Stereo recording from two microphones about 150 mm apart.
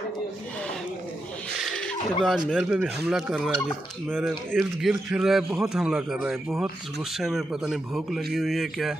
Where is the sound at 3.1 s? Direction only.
5° right (ahead or behind).